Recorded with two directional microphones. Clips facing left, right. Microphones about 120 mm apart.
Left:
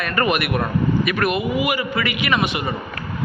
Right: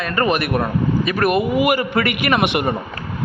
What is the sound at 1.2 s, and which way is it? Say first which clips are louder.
A man's voice: right 4 dB; 45° right (ahead or behind).